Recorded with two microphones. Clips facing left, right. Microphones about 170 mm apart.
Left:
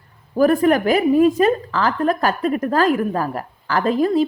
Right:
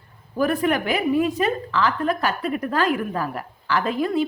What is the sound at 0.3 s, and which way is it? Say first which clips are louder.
A woman's voice: left 6 dB; 40° left (ahead or behind).